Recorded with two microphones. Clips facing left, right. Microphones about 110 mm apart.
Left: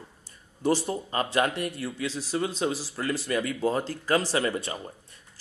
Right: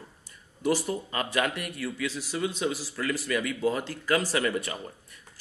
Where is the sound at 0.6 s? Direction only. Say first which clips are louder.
Left 1 dB; 30° left (ahead or behind).